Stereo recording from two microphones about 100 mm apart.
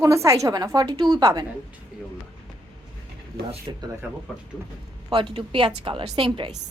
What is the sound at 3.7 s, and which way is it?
Speech, 45° right (ahead or behind).